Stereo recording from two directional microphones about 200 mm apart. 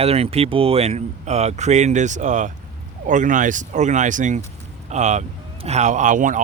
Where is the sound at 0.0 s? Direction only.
30° right (ahead or behind).